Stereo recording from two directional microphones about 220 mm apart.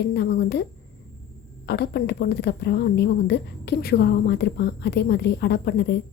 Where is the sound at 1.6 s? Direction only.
50° left (ahead or behind).